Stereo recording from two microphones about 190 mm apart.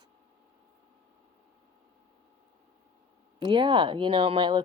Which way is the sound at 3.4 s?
25° right (ahead or behind).